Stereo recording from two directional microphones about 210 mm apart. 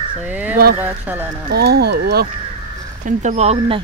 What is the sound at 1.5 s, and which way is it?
Speech, 50° right (ahead or behind).